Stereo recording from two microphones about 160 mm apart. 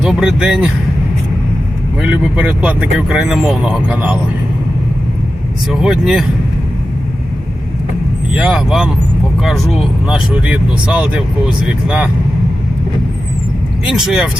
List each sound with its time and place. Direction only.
0.0 s speech: 5° right (ahead or behind)
2.0 s speech: 5° right (ahead or behind)
5.6 s speech: 5° right (ahead or behind)
8.3 s speech: 5° right (ahead or behind)
10.1 s speech: 5° right (ahead or behind)
13.9 s speech: 5° right (ahead or behind)